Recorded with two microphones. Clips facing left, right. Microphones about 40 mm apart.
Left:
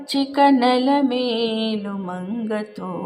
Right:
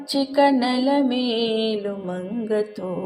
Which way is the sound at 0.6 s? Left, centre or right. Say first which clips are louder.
Left 3 dB; left.